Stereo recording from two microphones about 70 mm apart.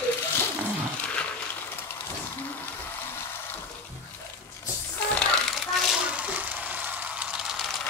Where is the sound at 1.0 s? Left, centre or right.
Centre.